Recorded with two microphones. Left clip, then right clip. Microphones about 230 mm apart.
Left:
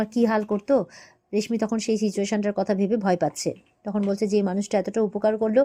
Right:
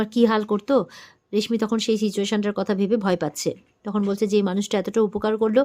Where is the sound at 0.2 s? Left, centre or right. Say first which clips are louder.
Right 3 dB; centre.